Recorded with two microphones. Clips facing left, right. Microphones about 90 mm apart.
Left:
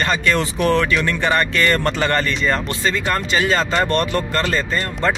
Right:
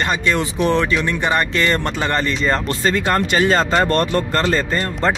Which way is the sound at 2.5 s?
40° right (ahead or behind).